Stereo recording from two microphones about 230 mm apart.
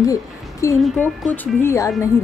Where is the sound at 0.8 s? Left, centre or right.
Centre.